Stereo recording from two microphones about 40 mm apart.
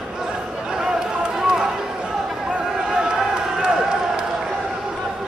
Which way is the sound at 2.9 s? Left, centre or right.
Centre.